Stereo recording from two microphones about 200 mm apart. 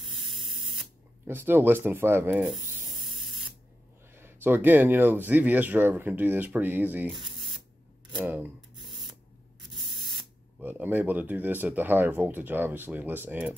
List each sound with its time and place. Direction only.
0.5 s spray: 25° right (ahead or behind)
1.2 s rub: 10° right (ahead or behind)
3.2 s spray: 25° right (ahead or behind)
4.1 s speech: 10° right (ahead or behind)
7.2 s printer: 25° right (ahead or behind)
8.2 s speech: 10° right (ahead or behind)
9.7 s spray: 25° right (ahead or behind)
10.6 s speech: 10° right (ahead or behind)